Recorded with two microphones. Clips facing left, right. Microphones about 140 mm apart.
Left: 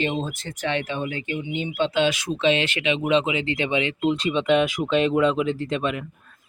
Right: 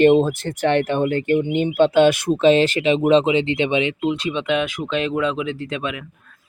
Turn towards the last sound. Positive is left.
turn(degrees=0)  # may be behind; listen again after turning